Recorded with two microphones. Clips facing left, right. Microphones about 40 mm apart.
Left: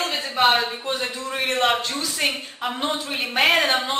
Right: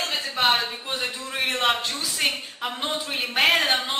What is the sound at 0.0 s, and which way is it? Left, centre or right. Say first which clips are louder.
A man's voice: left 3 dB; centre.